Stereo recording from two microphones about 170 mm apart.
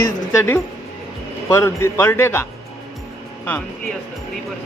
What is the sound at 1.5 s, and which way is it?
A man's voice, 15° left (ahead or behind).